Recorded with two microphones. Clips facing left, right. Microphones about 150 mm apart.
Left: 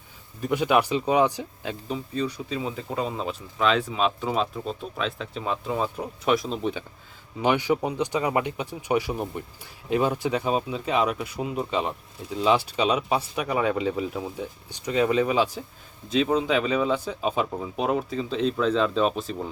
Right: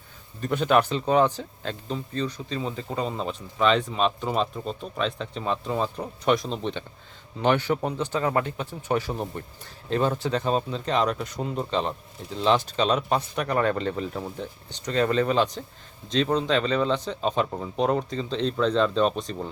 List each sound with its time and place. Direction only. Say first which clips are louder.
0.4 s speech: even; 10° left (ahead or behind)